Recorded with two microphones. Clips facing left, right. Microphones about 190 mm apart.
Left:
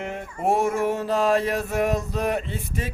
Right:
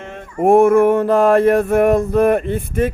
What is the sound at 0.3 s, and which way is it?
Male singing, 55° right (ahead or behind).